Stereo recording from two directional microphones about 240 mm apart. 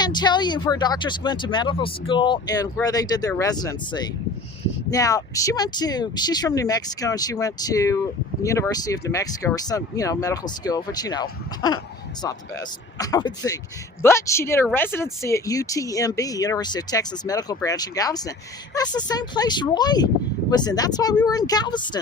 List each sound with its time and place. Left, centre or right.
0.0 s speech: centre